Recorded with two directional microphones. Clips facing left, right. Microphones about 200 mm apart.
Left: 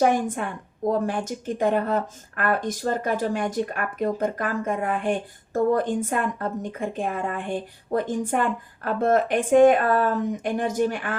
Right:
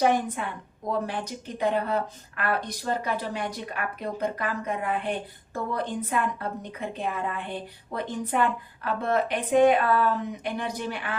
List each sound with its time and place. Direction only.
0.0 s a woman's voice: 45° left (ahead or behind)